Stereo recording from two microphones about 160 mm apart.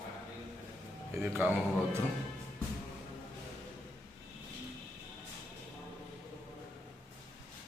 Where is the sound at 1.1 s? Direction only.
15° right (ahead or behind).